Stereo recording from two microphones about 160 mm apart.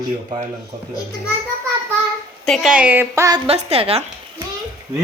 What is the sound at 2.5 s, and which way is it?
Speech, 5° right (ahead or behind).